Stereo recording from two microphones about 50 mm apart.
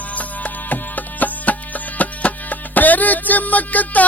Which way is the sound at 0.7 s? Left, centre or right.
Left.